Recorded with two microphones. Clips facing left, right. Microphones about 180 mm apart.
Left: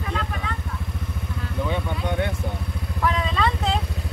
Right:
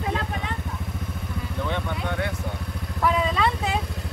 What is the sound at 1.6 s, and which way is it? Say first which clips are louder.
Vehicle: left 2 dB; 10° left (ahead or behind).